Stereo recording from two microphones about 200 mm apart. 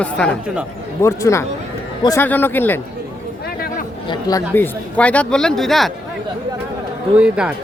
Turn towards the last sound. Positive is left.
turn(degrees=-5)  # may be behind; listen again after turning